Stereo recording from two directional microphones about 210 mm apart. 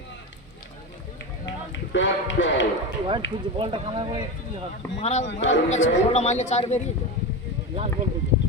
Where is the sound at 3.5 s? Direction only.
25° right (ahead or behind).